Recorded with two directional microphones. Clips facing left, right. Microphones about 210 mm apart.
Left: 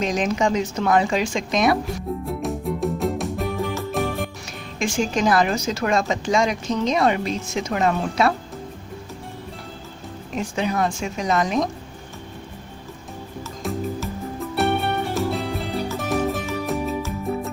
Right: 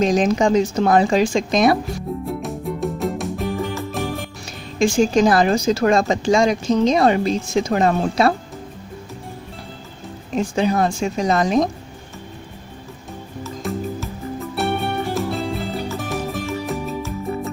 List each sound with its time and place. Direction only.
0.0 s a woman's voice: 35° right (ahead or behind)
2.2 s music: centre (ahead or behind)
4.8 s a woman's voice: 35° right (ahead or behind)
10.3 s a woman's voice: 35° right (ahead or behind)
13.4 s music: centre (ahead or behind)